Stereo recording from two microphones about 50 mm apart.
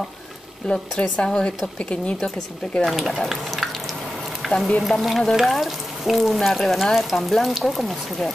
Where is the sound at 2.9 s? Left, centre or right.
Centre.